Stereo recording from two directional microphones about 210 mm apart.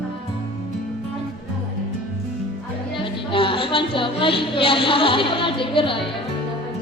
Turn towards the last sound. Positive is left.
turn(degrees=25)  # may be behind; listen again after turning